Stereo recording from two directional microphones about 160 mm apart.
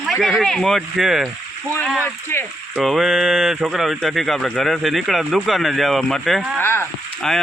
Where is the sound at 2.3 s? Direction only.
15° left (ahead or behind).